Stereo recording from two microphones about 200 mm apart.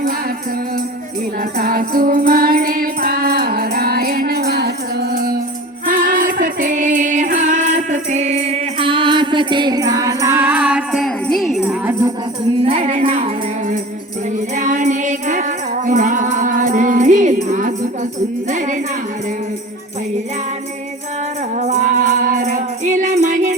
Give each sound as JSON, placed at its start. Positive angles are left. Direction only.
{"t": 1.5, "sound": "music", "side_deg": -45}
{"t": 12.6, "sound": "music", "side_deg": -35}
{"t": 21.6, "sound": "music", "side_deg": -40}